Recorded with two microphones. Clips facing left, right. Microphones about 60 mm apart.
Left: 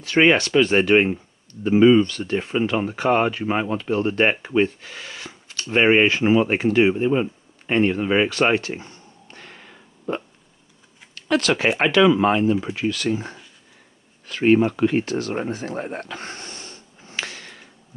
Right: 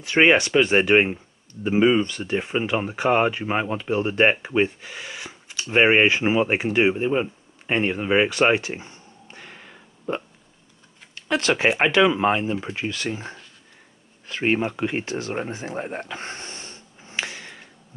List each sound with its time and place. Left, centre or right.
0.0 s speech: centre
11.1 s speech: right
14.2 s speech: right
15.5 s snort: centre